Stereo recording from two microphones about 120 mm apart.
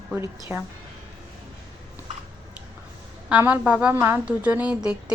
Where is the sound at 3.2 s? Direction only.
10° right (ahead or behind).